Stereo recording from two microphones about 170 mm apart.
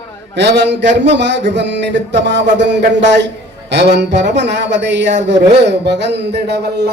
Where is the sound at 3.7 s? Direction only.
80° right.